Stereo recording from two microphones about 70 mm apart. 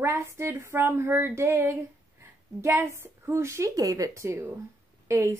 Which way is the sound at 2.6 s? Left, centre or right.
Right.